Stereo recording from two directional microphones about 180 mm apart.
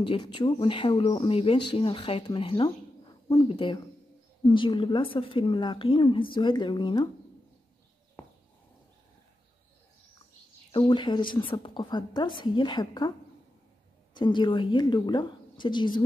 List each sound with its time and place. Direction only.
0.0 s a woman's voice: 25° left (ahead or behind)
10.7 s a woman's voice: 25° left (ahead or behind)
14.1 s a woman's voice: 25° left (ahead or behind)